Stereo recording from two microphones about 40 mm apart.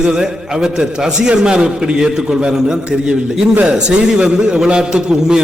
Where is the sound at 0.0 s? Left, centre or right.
Centre.